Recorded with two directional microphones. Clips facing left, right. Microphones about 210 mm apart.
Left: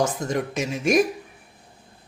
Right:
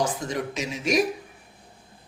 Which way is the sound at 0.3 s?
50° left (ahead or behind).